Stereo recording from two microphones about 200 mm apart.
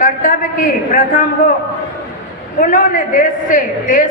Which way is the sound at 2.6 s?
40° left (ahead or behind).